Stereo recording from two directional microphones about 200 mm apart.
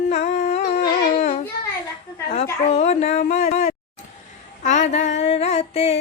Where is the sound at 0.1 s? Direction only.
35° left (ahead or behind).